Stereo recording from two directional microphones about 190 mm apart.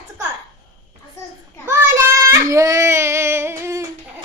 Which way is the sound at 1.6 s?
15° right (ahead or behind).